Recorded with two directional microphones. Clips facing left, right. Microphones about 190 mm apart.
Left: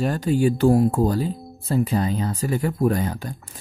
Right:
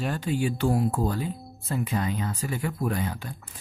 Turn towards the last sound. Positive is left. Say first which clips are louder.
# left 6 dB
turn(degrees=40)  # may be behind; listen again after turning